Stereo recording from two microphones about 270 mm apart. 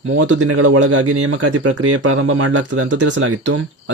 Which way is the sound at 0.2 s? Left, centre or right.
Right.